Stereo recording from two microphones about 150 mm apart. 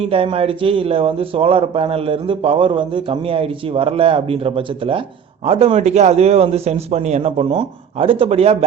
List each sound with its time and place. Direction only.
0.0 s a man's voice: 40° right (ahead or behind)